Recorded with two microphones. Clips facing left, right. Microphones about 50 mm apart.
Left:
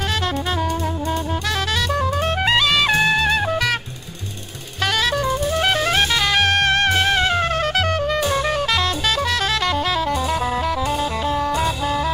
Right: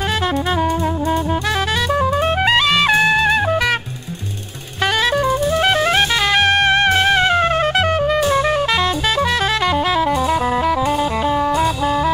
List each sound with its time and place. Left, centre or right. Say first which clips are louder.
1.9 s music: right 4 dB; centre
4.8 s music: right 4 dB; centre